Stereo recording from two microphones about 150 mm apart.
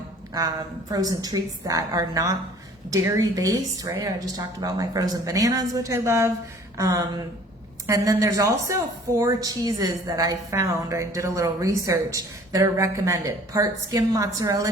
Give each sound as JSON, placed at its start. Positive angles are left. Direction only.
{"t": 0.3, "sound": "a woman's voice", "side_deg": -25}